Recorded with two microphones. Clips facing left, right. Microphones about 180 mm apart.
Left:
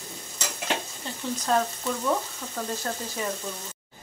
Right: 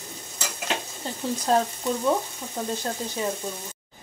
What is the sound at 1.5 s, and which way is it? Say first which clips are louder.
Frying: right 2 dB; 35° right (ahead or behind).